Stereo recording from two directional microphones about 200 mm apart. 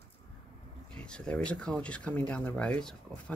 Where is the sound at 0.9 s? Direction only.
5° left (ahead or behind).